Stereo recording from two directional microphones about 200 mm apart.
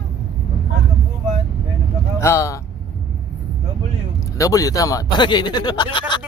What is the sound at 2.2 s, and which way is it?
Speech, 15° left (ahead or behind).